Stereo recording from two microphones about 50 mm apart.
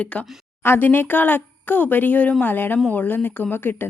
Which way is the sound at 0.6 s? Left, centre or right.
Left.